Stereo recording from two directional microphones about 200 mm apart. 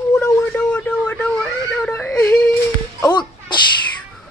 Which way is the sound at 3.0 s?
20° left (ahead or behind).